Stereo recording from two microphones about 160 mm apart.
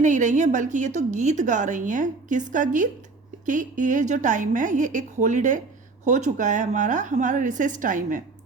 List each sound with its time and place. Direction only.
0.0 s a woman's voice: 50° right (ahead or behind)